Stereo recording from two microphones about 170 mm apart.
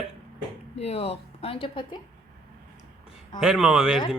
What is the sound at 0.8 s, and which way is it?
Speech, 35° left (ahead or behind).